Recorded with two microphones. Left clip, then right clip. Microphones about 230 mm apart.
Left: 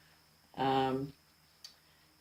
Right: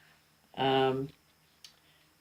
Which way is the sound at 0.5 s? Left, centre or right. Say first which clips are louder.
Right 4 dB; right.